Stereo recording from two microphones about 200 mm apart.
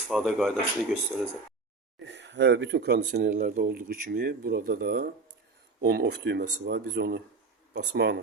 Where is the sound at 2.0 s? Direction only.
60° right (ahead or behind).